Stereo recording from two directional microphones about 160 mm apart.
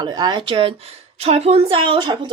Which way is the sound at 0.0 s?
25° right (ahead or behind).